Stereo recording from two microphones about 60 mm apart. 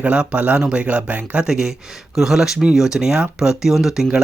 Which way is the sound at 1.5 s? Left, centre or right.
Centre.